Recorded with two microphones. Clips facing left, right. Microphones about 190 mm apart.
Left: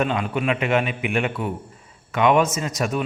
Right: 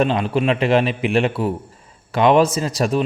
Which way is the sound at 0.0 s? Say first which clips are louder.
Right 5 dB; 30° right (ahead or behind).